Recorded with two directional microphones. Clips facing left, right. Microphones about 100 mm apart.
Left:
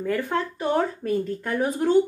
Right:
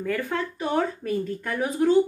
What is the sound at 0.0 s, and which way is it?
A woman's voice, 25° left (ahead or behind).